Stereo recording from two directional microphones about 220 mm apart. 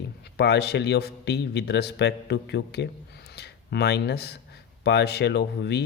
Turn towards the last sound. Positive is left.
turn(degrees=50)  # may be behind; listen again after turning